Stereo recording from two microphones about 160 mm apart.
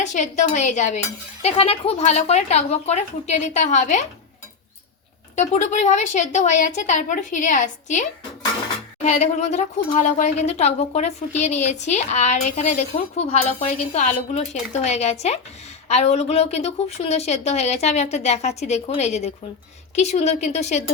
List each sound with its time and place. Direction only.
0.0 s speech: 50° left (ahead or behind)
5.4 s speech: 50° left (ahead or behind)
9.0 s speech: 45° left (ahead or behind)